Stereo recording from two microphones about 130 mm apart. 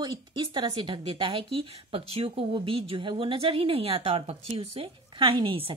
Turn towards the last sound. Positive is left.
turn(degrees=-40)  # may be behind; listen again after turning